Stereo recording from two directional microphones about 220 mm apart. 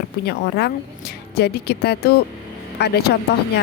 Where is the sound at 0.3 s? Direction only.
50° left (ahead or behind).